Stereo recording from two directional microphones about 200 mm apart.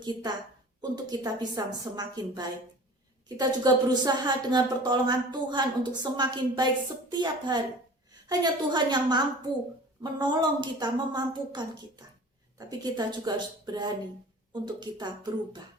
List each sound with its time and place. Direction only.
0.0 s a woman's voice: 20° right (ahead or behind)